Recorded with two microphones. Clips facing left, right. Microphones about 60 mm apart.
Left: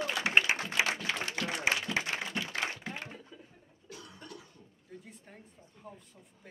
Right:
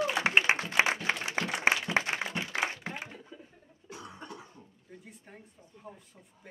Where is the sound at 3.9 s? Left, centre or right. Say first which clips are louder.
Right 4 dB; right.